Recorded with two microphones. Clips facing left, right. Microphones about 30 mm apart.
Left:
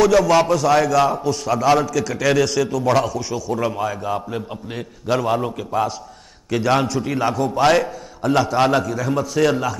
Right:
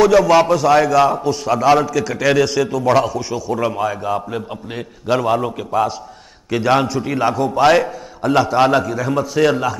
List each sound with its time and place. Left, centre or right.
0.0 s a man's voice: centre